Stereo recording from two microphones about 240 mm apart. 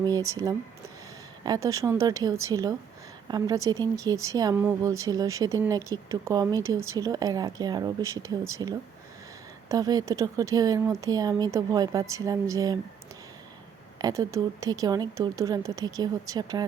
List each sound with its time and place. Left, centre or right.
0.0 s speech: centre
14.0 s speech: centre